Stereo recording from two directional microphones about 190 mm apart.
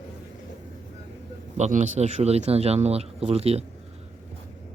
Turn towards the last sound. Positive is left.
turn(degrees=-30)  # may be behind; listen again after turning